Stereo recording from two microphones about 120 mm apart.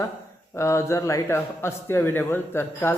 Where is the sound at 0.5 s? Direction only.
25° left (ahead or behind).